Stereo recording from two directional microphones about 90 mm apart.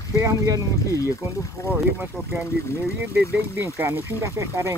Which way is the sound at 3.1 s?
25° right (ahead or behind).